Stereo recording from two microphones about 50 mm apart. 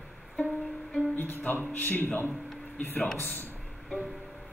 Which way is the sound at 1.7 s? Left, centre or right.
Left.